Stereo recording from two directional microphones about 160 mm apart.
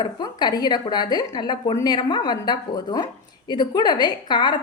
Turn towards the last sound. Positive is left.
turn(degrees=30)  # may be behind; listen again after turning